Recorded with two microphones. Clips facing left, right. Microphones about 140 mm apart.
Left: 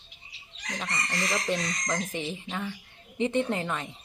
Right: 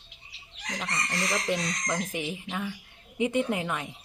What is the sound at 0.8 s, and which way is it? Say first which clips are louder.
Speech: even; centre (ahead or behind).